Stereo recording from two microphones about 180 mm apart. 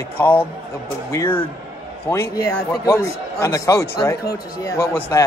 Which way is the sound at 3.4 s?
15° left (ahead or behind).